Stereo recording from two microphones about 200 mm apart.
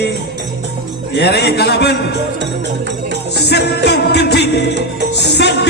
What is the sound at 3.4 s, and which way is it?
Music, 55° left (ahead or behind).